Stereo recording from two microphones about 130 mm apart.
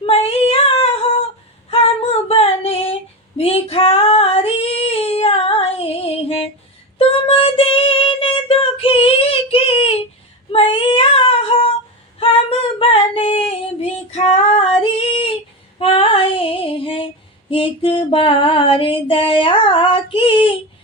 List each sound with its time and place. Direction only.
0.0 s child singing: 50° left (ahead or behind)
1.7 s female singing: 50° left (ahead or behind)
7.0 s child singing: 45° left (ahead or behind)
12.2 s female singing: 45° left (ahead or behind)
17.5 s music: 45° left (ahead or behind)